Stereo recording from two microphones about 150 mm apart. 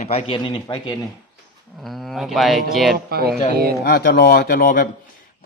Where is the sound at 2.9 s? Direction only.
90° right.